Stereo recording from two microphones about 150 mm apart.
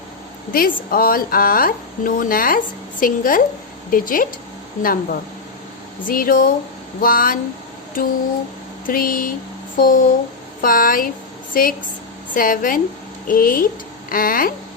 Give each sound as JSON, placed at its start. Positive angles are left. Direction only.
{"t": 0.5, "sound": "a woman's voice", "side_deg": 75}
{"t": 8.9, "sound": "a woman's voice", "side_deg": 75}